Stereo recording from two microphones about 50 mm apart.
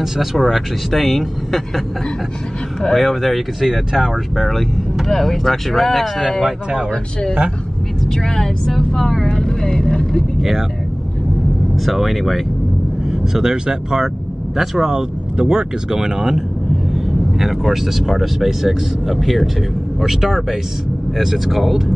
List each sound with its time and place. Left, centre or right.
0.0 s speech: centre
2.9 s speech: centre
4.4 s speech: centre
6.9 s speech: centre
9.3 s speech: centre
11.7 s speech: centre
13.1 s speech: centre